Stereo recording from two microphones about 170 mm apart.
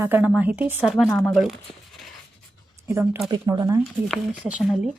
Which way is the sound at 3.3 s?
25° right (ahead or behind).